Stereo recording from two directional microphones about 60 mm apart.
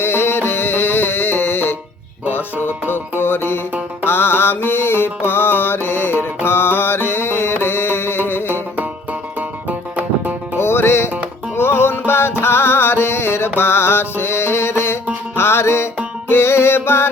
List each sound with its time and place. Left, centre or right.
0.0 s music: left
2.6 s music: right
2.9 s music: left
10.6 s music: left
13.6 s mantra: left
15.4 s music: left